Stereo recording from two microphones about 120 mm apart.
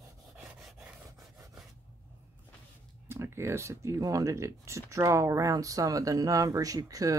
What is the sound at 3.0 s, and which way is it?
Speech, 20° right (ahead or behind).